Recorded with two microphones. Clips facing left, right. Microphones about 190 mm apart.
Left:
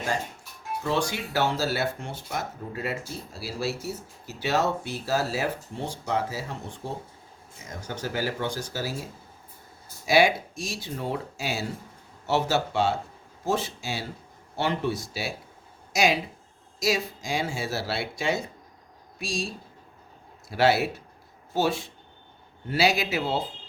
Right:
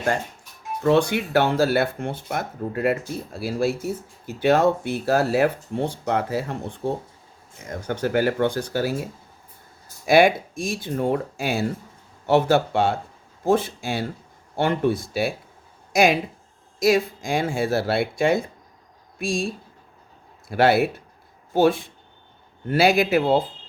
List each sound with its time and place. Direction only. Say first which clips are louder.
0.8 s speech: right 9 dB; 60° right (ahead or behind)
10.1 s speech: right 5 dB; 55° right (ahead or behind)